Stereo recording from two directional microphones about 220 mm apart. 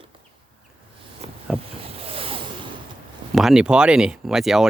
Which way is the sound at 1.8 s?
25° right (ahead or behind).